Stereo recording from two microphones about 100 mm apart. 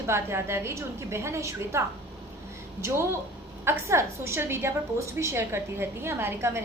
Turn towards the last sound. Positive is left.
turn(degrees=-25)  # may be behind; listen again after turning